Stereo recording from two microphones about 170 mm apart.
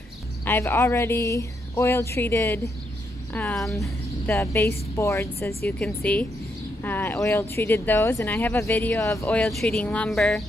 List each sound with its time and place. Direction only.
0.5 s speech: 10° left (ahead or behind)
3.3 s speech: 5° left (ahead or behind)
4.3 s speech: 15° left (ahead or behind)
9.4 s speech: centre (ahead or behind)